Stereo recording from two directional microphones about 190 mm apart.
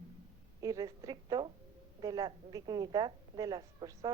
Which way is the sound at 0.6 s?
20° right (ahead or behind).